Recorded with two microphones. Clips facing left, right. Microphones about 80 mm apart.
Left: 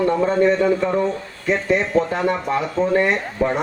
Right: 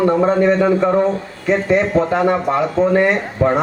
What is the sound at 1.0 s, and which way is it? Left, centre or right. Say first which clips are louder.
Speech: right 4 dB; right.